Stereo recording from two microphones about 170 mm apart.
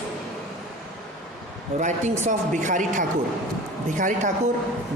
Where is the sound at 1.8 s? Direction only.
45° right (ahead or behind).